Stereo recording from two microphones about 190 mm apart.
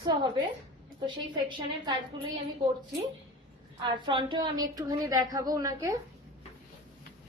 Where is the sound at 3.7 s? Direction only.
25° right (ahead or behind).